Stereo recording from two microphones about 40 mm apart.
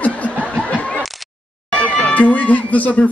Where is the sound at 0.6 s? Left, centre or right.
Left.